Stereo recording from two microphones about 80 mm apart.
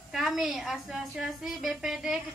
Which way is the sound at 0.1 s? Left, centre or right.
Centre.